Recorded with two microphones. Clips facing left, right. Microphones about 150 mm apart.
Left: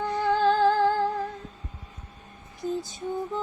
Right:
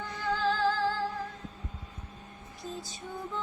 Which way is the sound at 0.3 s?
55° left (ahead or behind).